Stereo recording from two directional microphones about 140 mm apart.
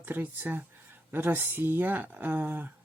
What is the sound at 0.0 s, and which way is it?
Speech, 15° right (ahead or behind).